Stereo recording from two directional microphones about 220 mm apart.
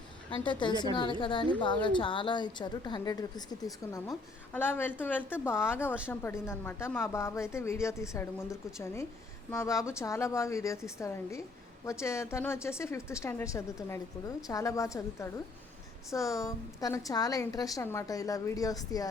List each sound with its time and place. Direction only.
0.3 s a woman's voice: 20° left (ahead or behind)